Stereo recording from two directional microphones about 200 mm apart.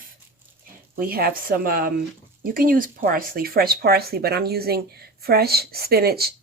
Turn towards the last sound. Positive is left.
turn(degrees=-50)  # may be behind; listen again after turning